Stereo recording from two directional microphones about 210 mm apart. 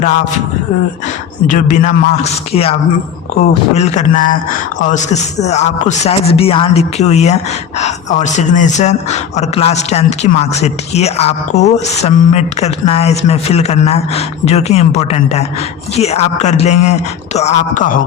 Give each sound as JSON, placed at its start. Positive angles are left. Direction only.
{"t": 1.5, "sound": "speech", "side_deg": 35}
{"t": 3.8, "sound": "speech", "side_deg": 35}